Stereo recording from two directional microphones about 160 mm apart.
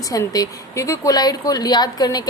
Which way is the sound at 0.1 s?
20° left (ahead or behind).